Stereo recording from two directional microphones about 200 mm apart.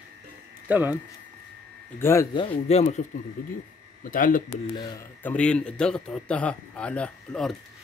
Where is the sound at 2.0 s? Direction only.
15° left (ahead or behind); by 3.0 s 35° left (ahead or behind).